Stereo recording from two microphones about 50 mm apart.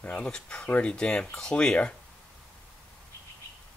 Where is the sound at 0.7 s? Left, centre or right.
Left.